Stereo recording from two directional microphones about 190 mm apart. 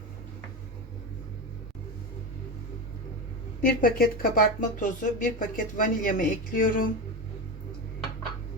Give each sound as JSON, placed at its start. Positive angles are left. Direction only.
{"t": 3.6, "sound": "speech", "side_deg": 50}